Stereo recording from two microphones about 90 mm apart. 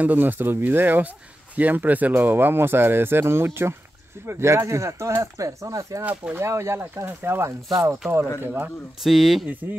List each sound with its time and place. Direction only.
0.0 s speech: 20° right (ahead or behind); by 6.0 s 35° right (ahead or behind)
6.0 s speech: 20° right (ahead or behind)
6.4 s speech: 30° right (ahead or behind)
9.0 s speech: centre (ahead or behind)